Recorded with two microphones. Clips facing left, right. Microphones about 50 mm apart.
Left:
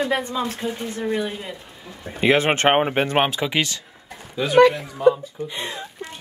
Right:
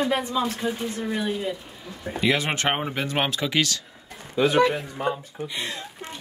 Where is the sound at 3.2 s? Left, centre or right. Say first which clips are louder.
Left 2 dB; centre.